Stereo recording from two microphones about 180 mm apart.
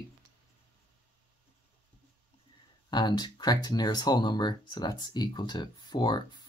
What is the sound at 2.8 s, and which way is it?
Speech, 25° left (ahead or behind).